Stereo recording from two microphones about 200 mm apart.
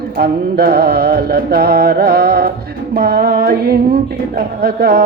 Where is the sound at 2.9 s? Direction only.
50° right (ahead or behind).